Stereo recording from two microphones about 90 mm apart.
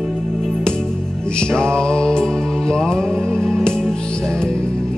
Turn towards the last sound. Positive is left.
turn(degrees=10)  # may be behind; listen again after turning